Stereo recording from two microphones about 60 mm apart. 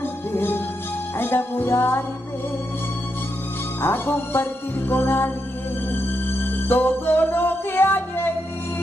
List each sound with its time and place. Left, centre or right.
0.3 s music: left
3.8 s music: left